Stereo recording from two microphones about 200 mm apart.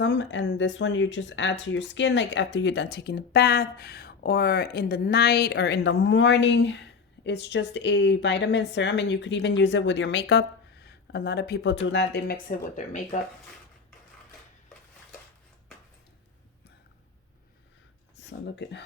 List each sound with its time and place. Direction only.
0.0 s speech: 65° left (ahead or behind); by 13.1 s 40° left (ahead or behind)
18.3 s speech: 60° left (ahead or behind)